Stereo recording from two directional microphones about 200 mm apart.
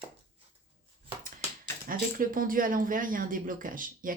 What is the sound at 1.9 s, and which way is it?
Speech, 45° right (ahead or behind).